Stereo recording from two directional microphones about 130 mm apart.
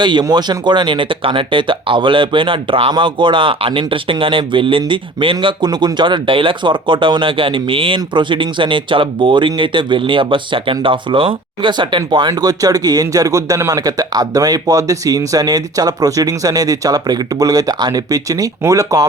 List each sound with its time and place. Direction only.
0.0 s speech: 35° right (ahead or behind)